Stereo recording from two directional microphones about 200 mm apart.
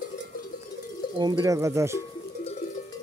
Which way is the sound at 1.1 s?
20° right (ahead or behind).